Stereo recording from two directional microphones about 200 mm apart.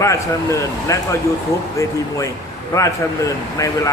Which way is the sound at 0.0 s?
15° left (ahead or behind).